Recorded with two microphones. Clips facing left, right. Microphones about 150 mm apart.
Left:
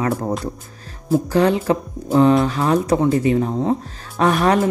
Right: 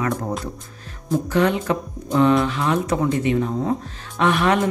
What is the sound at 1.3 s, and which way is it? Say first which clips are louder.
Speech: left 2 dB; 35° left (ahead or behind).